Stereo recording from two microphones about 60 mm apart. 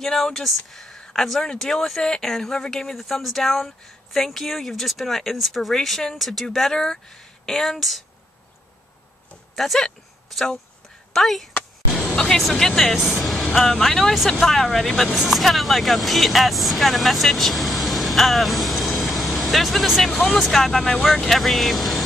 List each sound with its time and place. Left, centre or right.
0.0 s speech: centre
9.6 s speech: centre